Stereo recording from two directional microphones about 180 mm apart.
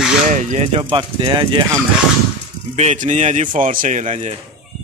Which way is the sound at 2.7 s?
40° right (ahead or behind).